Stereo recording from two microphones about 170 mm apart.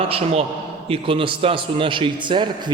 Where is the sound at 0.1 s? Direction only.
35° right (ahead or behind).